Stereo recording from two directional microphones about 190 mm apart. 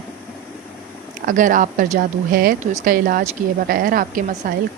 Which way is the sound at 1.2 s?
45° right (ahead or behind).